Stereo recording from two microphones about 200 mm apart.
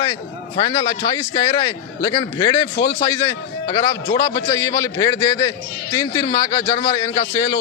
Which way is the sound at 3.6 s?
15° left (ahead or behind).